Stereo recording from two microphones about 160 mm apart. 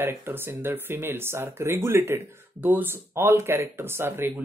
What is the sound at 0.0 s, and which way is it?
A woman's voice, 15° right (ahead or behind).